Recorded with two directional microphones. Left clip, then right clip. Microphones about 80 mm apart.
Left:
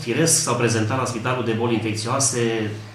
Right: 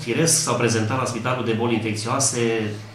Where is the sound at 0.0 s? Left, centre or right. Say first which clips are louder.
Left 1 dB; centre.